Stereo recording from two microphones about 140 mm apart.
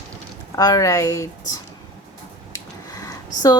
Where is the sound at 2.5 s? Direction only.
25° left (ahead or behind).